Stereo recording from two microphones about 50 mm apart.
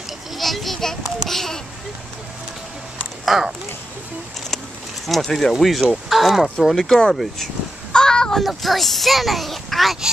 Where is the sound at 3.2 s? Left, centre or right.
Centre.